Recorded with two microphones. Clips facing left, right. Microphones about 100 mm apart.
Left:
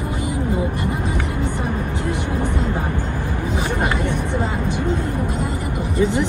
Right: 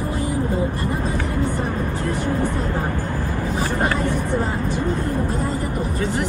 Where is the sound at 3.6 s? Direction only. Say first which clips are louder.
Right 1 dB; 15° left (ahead or behind).